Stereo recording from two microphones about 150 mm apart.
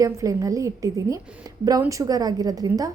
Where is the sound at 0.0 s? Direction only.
25° right (ahead or behind).